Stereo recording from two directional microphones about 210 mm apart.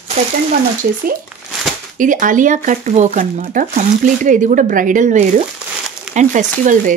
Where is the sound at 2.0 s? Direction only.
40° right (ahead or behind).